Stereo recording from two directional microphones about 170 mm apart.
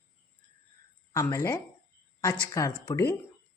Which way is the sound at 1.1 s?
20° left (ahead or behind).